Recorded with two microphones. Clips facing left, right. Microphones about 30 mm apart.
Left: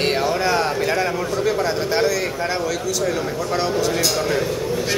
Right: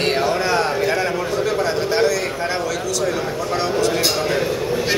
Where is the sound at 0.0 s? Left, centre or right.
Centre.